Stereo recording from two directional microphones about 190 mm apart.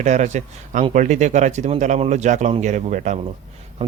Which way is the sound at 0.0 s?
40° right (ahead or behind).